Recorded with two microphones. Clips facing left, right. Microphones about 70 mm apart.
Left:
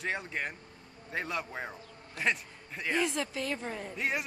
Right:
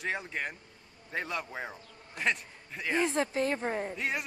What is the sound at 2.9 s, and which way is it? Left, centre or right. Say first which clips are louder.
A woman's voice: right 4 dB; right.